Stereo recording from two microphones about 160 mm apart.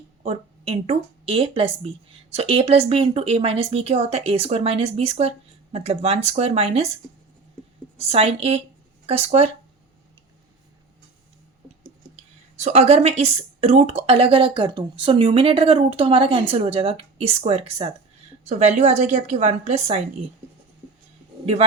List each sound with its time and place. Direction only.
0.2 s a woman's voice: 40° right (ahead or behind)
12.5 s a woman's voice: 45° right (ahead or behind)